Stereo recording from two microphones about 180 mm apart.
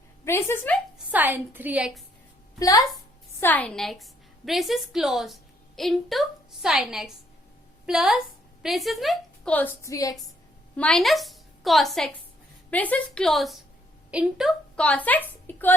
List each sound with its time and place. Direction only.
0.3 s a woman's voice: 15° left (ahead or behind)
1.1 s a woman's voice: 10° right (ahead or behind)
2.6 s a woman's voice: 20° left (ahead or behind)
3.4 s a woman's voice: 10° left (ahead or behind)
10.8 s a woman's voice: 5° left (ahead or behind)